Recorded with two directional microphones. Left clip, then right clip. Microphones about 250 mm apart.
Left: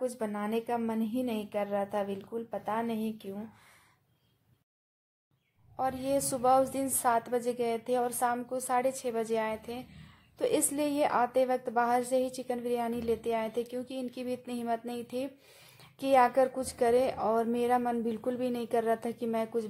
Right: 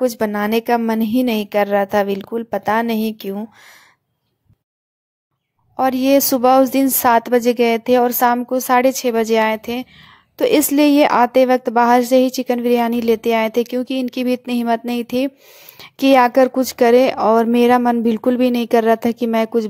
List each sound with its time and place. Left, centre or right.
0.0 s a woman's voice: right
5.8 s a woman's voice: right